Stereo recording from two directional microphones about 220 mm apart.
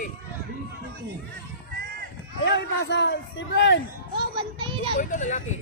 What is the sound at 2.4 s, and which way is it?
A man's voice, 50° left (ahead or behind).